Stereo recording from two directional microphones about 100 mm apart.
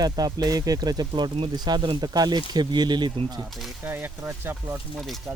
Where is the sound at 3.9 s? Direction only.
20° right (ahead or behind).